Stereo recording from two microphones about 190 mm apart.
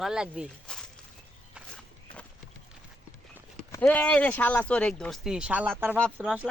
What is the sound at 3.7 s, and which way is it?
Speech, 10° left (ahead or behind).